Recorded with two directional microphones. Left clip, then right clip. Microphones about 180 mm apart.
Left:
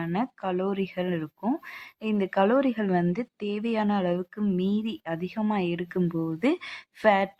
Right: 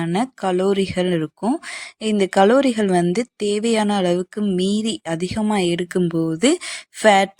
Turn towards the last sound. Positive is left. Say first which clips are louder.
# right 8 dB
turn(degrees=-35)  # may be behind; listen again after turning